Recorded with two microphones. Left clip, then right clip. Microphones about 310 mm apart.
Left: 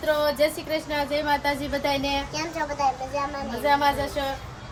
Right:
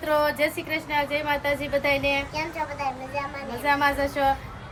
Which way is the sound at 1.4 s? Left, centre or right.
Centre.